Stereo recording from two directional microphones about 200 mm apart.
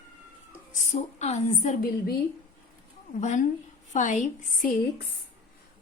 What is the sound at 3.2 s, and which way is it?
A woman's voice, 40° left (ahead or behind).